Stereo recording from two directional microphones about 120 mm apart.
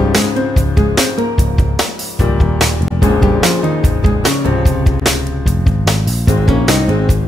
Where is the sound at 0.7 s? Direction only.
Centre (ahead or behind).